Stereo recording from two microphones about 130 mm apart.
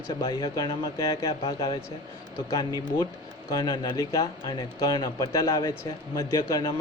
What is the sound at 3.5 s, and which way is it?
Speech, 30° left (ahead or behind).